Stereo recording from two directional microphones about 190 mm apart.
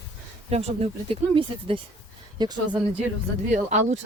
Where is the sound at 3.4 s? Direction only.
40° right (ahead or behind).